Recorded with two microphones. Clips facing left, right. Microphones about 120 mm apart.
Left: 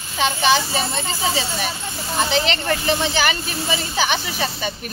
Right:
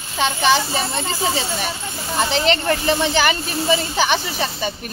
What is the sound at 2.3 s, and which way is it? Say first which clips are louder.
Speech: right 4 dB; 40° right (ahead or behind).